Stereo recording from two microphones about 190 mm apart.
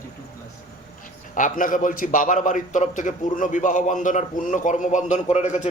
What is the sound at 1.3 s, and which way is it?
A man's voice, 45° left (ahead or behind).